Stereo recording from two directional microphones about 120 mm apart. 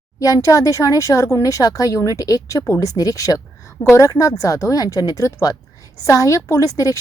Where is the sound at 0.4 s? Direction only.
25° left (ahead or behind).